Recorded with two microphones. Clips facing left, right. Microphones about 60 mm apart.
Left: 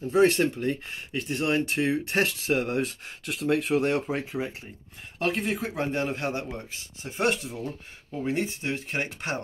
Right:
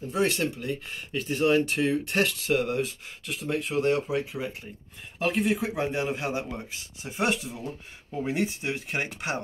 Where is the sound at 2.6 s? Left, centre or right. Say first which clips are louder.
Even; left.